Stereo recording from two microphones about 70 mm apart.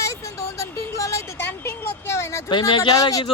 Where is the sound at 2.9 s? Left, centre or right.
Left.